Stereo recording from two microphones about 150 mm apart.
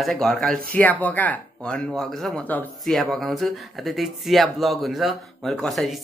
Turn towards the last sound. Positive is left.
turn(degrees=0)  # may be behind; listen again after turning